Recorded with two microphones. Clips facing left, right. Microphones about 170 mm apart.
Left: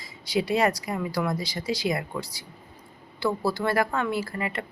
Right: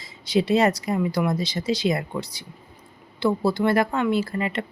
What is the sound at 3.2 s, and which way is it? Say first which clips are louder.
Speech: right 5 dB; 20° right (ahead or behind).